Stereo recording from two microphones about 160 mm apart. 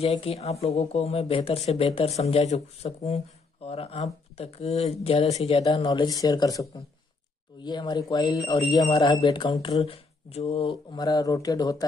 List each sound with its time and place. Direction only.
0.0 s speech: 40° left (ahead or behind)
5.9 s speech: 25° left (ahead or behind); by 10.7 s 40° left (ahead or behind)
10.9 s speech: 25° left (ahead or behind)